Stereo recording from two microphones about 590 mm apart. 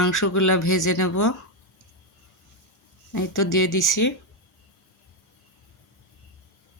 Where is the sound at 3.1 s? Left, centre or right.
Left.